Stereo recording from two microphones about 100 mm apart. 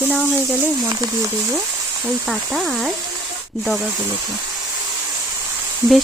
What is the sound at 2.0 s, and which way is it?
Speech, centre (ahead or behind).